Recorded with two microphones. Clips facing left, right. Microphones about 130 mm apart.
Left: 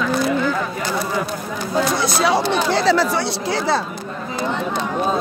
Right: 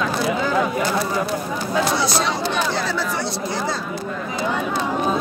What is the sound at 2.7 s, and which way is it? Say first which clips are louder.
Speech: left 7 dB; 90° left.